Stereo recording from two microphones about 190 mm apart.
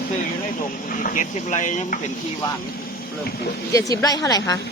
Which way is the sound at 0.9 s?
45° left (ahead or behind).